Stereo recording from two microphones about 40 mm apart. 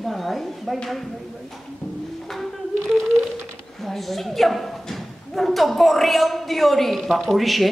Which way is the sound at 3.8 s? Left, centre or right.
Centre.